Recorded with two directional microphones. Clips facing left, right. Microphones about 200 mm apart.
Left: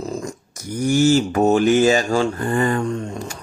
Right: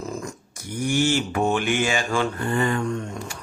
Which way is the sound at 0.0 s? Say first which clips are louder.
Left 4 dB; 35° left (ahead or behind).